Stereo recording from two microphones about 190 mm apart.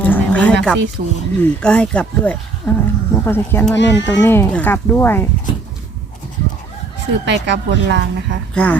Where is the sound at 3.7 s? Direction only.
70° left (ahead or behind).